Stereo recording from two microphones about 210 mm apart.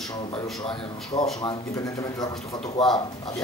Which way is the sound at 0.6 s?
25° left (ahead or behind).